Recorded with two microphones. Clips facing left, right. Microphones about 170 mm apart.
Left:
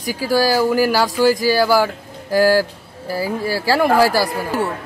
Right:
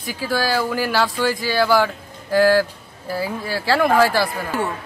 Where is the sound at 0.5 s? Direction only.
10° left (ahead or behind).